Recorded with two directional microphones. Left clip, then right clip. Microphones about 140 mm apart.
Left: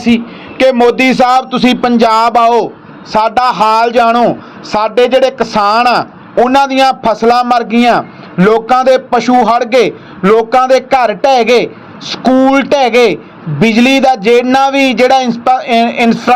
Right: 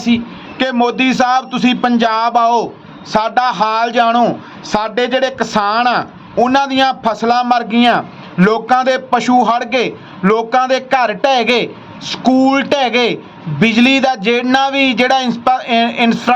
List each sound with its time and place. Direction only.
0.0 s a man's voice: 40° left (ahead or behind); by 16.3 s 20° left (ahead or behind)